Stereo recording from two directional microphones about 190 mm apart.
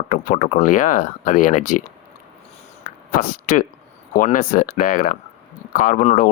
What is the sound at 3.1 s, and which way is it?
Speech, 50° left (ahead or behind).